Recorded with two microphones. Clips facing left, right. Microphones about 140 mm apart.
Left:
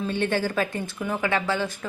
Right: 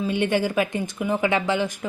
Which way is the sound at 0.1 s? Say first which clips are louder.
Right 3 dB; 15° right (ahead or behind).